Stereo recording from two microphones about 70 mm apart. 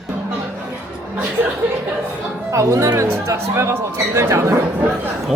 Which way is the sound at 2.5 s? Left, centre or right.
Right.